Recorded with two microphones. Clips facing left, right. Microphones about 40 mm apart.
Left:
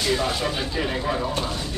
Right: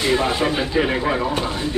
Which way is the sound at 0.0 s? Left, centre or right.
Right.